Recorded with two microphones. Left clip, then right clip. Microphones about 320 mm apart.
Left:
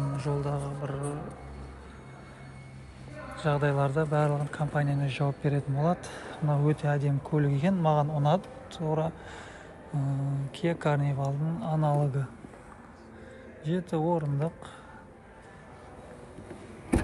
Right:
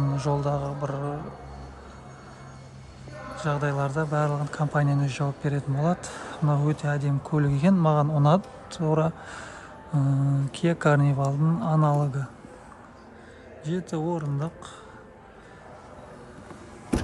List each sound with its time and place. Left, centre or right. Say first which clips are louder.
0.2 s speech: right 6 dB; centre
3.3 s speech: even; centre
10.5 s speech: right 5 dB; centre
13.7 s speech: left 1 dB; centre